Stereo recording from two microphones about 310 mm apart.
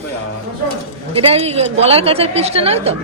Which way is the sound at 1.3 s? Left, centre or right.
Centre.